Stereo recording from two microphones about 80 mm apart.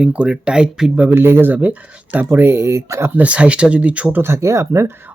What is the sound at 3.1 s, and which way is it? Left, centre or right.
Speech, centre.